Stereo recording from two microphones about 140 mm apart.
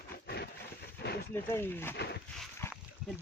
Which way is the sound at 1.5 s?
15° left (ahead or behind).